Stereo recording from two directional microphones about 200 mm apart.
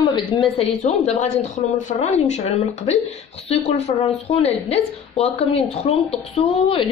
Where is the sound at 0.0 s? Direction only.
25° left (ahead or behind).